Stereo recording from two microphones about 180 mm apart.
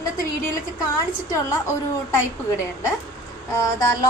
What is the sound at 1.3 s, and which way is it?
Child singing, 20° left (ahead or behind).